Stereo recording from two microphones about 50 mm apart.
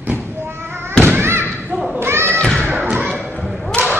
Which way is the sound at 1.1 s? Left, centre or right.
Right.